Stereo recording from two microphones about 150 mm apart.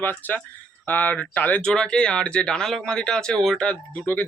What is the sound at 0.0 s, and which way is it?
Speech, 10° left (ahead or behind).